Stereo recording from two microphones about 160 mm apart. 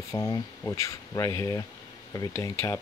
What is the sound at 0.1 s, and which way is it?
Speech, 20° left (ahead or behind).